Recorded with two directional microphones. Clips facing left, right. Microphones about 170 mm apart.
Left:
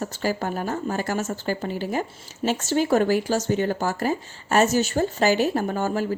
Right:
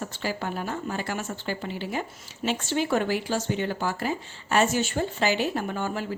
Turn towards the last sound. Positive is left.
turn(degrees=40)  # may be behind; listen again after turning